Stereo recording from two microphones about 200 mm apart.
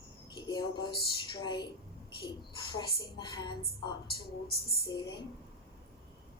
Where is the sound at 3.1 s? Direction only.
20° left (ahead or behind).